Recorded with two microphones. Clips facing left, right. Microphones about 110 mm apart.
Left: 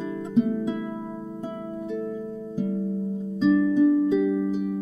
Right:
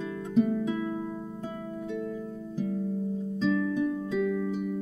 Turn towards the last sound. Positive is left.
turn(degrees=20)  # may be behind; listen again after turning